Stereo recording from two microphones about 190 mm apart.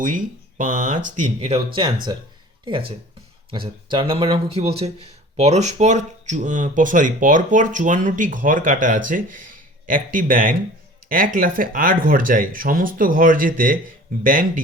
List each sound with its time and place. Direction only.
0.0 s speech: 45° right (ahead or behind); by 2.1 s 25° right (ahead or behind)
3.8 s speech: 25° right (ahead or behind); by 14.6 s 45° right (ahead or behind)